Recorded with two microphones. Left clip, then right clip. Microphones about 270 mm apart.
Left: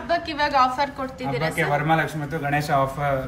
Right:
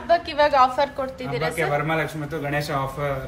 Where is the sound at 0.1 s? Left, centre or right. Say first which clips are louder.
Right 3 dB; centre.